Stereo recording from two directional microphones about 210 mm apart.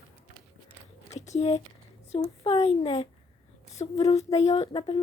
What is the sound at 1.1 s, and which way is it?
Speech, 35° left (ahead or behind).